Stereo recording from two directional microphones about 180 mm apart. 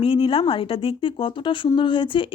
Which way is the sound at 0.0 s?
30° left (ahead or behind).